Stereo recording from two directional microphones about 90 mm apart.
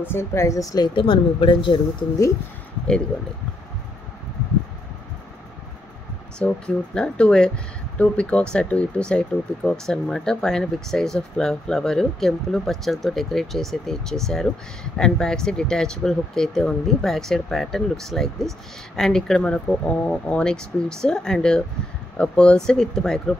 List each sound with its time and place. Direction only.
0.0 s speech: 25° left (ahead or behind); by 2.0 s 65° left (ahead or behind)
6.4 s speech: 10° left (ahead or behind)